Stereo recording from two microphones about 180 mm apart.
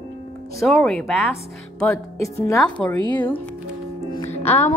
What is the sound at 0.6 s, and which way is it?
A woman's voice, 5° left (ahead or behind).